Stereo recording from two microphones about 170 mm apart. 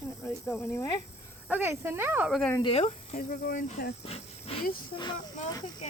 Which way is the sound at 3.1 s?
55° left (ahead or behind).